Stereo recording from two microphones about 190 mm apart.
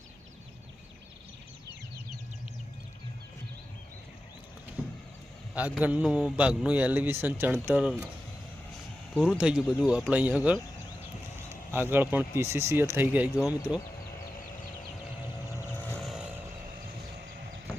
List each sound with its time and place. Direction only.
4.8 s vehicle: 10° right (ahead or behind)
5.5 s a man's voice: 10° right (ahead or behind)
9.1 s speech: centre (ahead or behind)
11.4 s a sound: 10° right (ahead or behind)
12.4 s a man's voice: 15° right (ahead or behind)
16.0 s vehicle: centre (ahead or behind)